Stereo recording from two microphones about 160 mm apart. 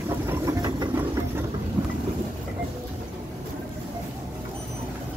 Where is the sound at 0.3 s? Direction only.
20° right (ahead or behind).